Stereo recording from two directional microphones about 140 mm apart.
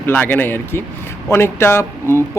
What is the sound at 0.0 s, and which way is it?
Speech, 10° left (ahead or behind).